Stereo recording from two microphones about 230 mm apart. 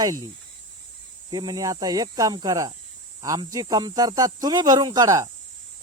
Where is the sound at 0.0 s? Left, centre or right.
Centre.